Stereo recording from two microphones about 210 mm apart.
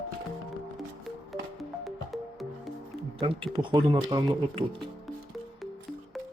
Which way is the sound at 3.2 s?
25° right (ahead or behind).